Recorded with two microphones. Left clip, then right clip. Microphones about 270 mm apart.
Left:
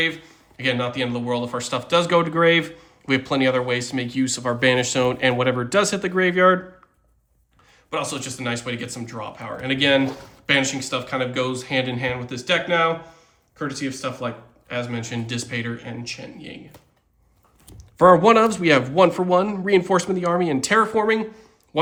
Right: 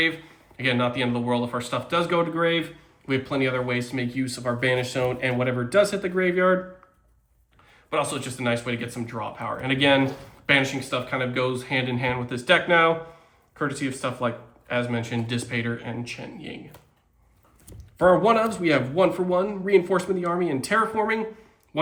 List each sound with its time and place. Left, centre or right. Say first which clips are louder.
0.5 s a man's voice: left 1 dB; centre
7.9 s speech: right 1 dB; centre
18.2 s a man's voice: left 5 dB; left